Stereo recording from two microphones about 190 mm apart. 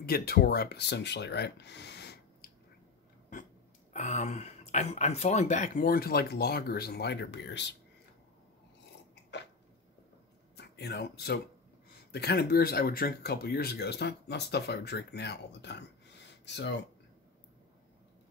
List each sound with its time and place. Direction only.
0.0 s speech: 50° left (ahead or behind)
3.9 s speech: 40° left (ahead or behind); by 7.6 s 65° left (ahead or behind)
10.5 s speech: 60° left (ahead or behind)